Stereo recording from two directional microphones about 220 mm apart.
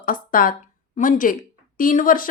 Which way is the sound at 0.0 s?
40° left (ahead or behind).